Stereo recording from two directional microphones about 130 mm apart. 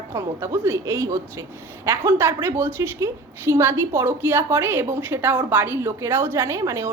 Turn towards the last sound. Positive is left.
turn(degrees=-25)  # may be behind; listen again after turning